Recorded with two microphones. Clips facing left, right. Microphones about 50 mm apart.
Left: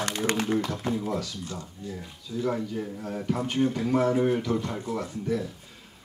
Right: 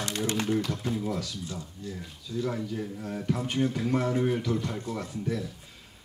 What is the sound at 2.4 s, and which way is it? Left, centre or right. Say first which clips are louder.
A man's voice: left 3 dB; centre.